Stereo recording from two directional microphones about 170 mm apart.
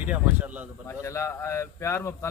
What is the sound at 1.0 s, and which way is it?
Speech, 15° left (ahead or behind).